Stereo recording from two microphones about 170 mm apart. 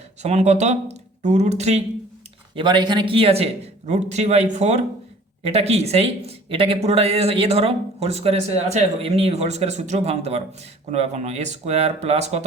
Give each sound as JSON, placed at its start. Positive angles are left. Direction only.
{"t": 0.2, "sound": "speech", "side_deg": -40}
{"t": 2.6, "sound": "speech", "side_deg": -25}